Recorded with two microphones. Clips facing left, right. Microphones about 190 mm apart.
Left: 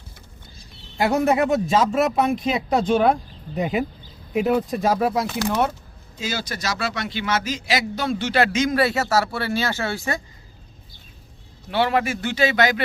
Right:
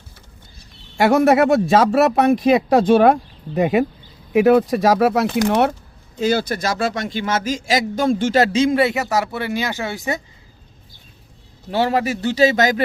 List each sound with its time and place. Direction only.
0.9 s speech: 80° right
6.1 s a man's voice: 55° right (ahead or behind)
8.5 s speech: 25° right (ahead or behind)
11.7 s a man's voice: 40° right (ahead or behind)